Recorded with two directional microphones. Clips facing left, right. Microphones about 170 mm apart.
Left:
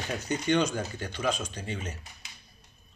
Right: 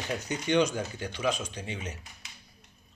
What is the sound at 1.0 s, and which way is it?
Speech, 15° right (ahead or behind).